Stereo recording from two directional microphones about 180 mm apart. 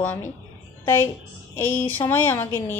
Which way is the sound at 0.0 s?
10° left (ahead or behind).